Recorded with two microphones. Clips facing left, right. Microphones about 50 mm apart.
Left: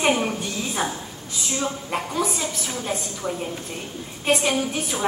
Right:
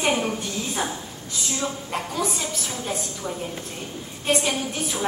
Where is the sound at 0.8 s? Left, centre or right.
Centre.